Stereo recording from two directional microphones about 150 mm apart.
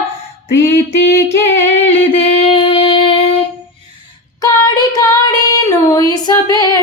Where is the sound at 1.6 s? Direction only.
15° left (ahead or behind).